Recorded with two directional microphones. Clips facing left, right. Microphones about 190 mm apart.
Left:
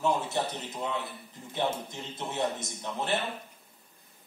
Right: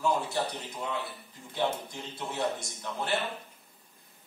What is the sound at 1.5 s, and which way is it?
A man's voice, 20° left (ahead or behind).